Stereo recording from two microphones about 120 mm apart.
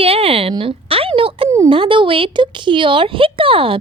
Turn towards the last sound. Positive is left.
turn(degrees=-50)  # may be behind; listen again after turning